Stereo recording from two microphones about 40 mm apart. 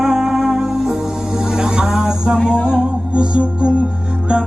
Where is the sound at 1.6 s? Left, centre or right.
Centre.